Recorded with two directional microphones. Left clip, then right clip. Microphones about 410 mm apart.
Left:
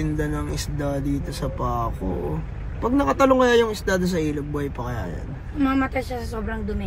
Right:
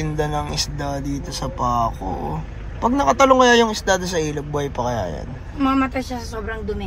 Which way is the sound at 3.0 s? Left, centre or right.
Centre.